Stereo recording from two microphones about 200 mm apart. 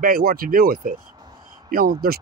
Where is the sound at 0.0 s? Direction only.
45° right (ahead or behind).